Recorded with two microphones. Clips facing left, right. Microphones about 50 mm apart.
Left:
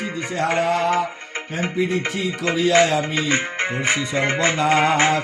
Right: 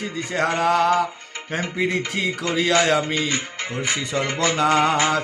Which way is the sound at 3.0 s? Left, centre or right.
Left.